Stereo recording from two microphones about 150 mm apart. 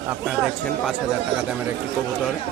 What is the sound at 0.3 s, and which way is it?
Speech, 5° right (ahead or behind).